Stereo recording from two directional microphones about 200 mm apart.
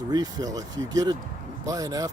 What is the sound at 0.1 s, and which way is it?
Speech, 20° right (ahead or behind).